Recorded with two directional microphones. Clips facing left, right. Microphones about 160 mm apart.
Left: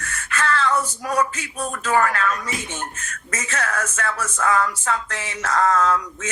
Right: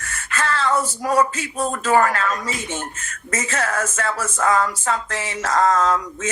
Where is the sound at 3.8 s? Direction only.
25° right (ahead or behind).